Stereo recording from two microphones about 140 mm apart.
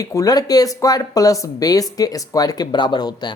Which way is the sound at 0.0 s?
25° left (ahead or behind).